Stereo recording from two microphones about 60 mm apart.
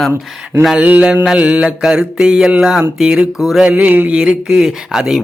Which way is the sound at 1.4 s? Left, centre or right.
Right.